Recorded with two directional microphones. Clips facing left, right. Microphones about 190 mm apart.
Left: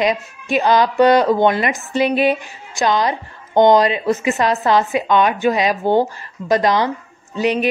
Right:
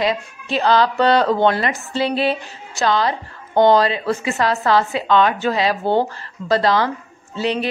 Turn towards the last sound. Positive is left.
turn(degrees=15)  # may be behind; listen again after turning